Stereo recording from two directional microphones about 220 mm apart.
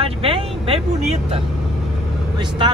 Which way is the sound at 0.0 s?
25° right (ahead or behind).